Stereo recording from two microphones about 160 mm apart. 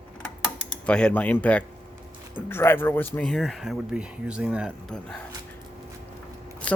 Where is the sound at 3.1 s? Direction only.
5° left (ahead or behind).